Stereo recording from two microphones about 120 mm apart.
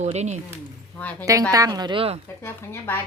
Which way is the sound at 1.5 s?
30° right (ahead or behind).